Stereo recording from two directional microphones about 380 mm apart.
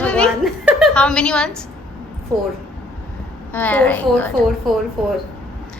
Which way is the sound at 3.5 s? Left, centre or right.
Centre.